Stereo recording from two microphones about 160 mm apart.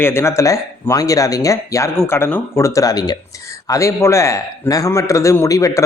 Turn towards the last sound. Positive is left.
turn(degrees=20)  # may be behind; listen again after turning